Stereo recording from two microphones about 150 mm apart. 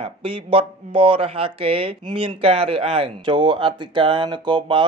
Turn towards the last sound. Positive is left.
turn(degrees=-30)  # may be behind; listen again after turning